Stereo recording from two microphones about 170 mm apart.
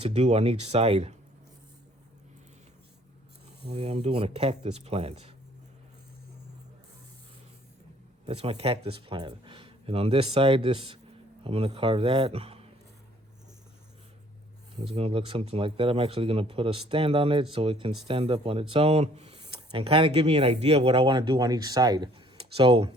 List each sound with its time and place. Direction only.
0.0 s speech: 40° right (ahead or behind)
3.8 s speech: 35° right (ahead or behind)
8.3 s speech: 35° right (ahead or behind)
14.9 s speech: 35° right (ahead or behind)
19.4 s speech: 30° right (ahead or behind)